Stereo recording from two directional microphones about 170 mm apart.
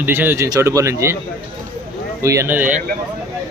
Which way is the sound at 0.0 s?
10° right (ahead or behind).